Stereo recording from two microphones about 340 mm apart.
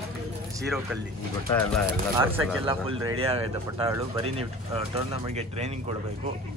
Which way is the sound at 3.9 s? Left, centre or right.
Centre.